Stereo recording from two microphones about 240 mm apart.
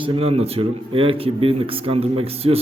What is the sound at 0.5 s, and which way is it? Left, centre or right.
A man's voice, right.